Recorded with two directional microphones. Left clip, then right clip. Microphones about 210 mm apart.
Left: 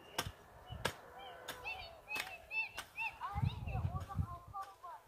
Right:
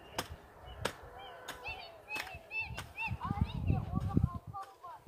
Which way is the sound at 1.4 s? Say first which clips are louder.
Right 1 dB; 5° left (ahead or behind).